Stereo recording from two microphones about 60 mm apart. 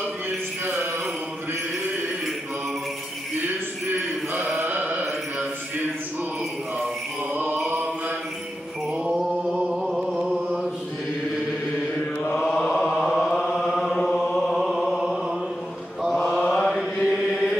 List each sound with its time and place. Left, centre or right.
4.6 s mantra: right
7.3 s a sound: right
9.1 s mantra: centre
12.4 s mantra: centre
13.0 s chant: centre
14.5 s a sound: centre
16.0 s mantra: centre
16.7 s mantra: centre